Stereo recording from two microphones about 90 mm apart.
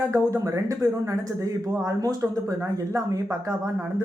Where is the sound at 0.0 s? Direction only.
35° right (ahead or behind).